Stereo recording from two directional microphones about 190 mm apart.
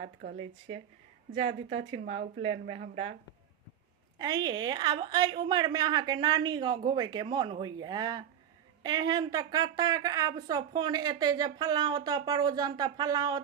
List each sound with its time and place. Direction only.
0.0 s speech: 50° right (ahead or behind)
1.9 s speech: 30° right (ahead or behind)
4.2 s a woman's voice: 20° right (ahead or behind)